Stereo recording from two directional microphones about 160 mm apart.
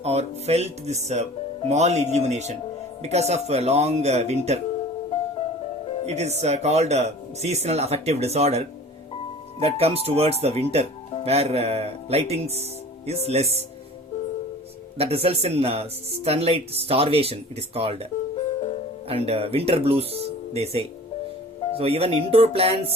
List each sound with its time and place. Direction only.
0.0 s speech: 40° right (ahead or behind)
6.1 s speech: 45° right (ahead or behind)
14.9 s speech: 40° right (ahead or behind)
18.3 s music: 40° left (ahead or behind)
19.0 s speech: 35° right (ahead or behind)